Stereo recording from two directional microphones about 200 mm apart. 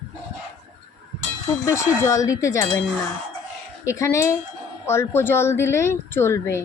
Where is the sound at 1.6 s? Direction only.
15° left (ahead or behind).